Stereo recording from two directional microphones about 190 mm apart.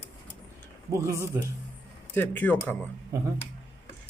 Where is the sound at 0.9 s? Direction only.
15° right (ahead or behind).